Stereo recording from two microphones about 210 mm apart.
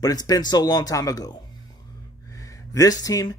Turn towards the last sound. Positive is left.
turn(degrees=15)  # may be behind; listen again after turning